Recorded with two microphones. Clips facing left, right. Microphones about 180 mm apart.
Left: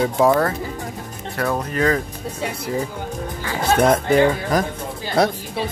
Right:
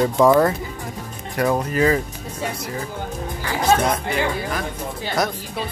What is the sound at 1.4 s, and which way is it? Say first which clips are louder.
Speech: right 2 dB; 10° right (ahead or behind).